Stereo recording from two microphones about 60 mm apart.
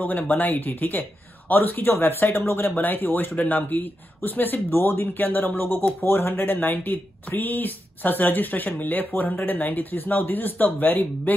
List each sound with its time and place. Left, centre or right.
0.0 s speech: left